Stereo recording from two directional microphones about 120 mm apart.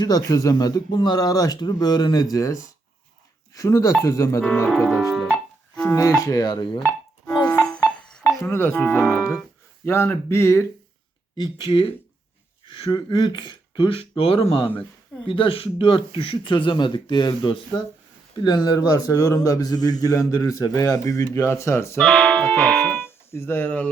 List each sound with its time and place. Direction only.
0.0 s a man's voice: 30° left (ahead or behind)
4.7 s piano: centre (ahead or behind)
5.8 s a man's voice: 25° left (ahead or behind)
7.3 s music: 30° left (ahead or behind)
7.9 s music: 5° left (ahead or behind)
8.2 s a man's voice: 25° left (ahead or behind)
11.3 s a man's voice: 40° left (ahead or behind); by 22.0 s 20° left (ahead or behind)
22.0 s speech: 5° left (ahead or behind)